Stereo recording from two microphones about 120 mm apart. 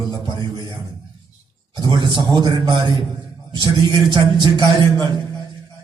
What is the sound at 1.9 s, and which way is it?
A man's voice, 40° right (ahead or behind).